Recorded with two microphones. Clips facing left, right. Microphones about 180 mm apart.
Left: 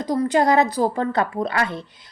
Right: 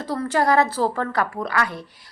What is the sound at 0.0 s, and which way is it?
A woman's voice, 15° left (ahead or behind).